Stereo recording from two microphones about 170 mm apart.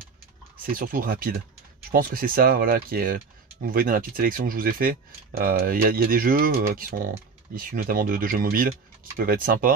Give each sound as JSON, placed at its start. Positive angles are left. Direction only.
{"t": 0.7, "sound": "speech", "side_deg": -55}